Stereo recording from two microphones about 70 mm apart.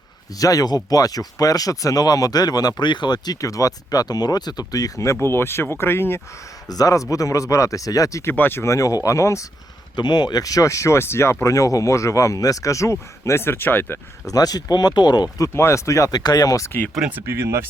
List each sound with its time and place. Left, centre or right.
0.3 s speech: left
3.4 s speech: left
5.2 s speech: left
6.7 s speech: left
8.2 s speech: left
8.7 s speech: left
9.9 s speech: left
14.3 s speech: left
15.5 s speech: left
16.1 s speech: left
17.1 s speech: right